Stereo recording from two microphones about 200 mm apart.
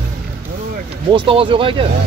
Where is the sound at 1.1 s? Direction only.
25° right (ahead or behind).